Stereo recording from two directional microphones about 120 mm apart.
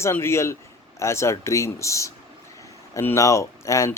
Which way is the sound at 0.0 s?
20° left (ahead or behind).